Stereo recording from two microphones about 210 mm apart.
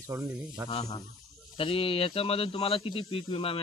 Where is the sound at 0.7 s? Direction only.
30° left (ahead or behind).